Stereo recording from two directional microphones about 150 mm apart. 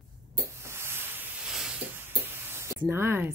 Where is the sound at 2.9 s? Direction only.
15° right (ahead or behind).